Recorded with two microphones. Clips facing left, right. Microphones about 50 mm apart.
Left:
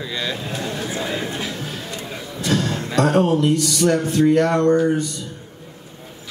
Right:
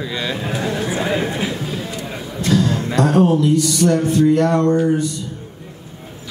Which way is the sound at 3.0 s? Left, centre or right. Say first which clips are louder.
Right 2 dB; left.